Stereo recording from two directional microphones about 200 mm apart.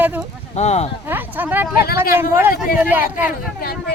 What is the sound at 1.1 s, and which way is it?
Speech, 10° right (ahead or behind).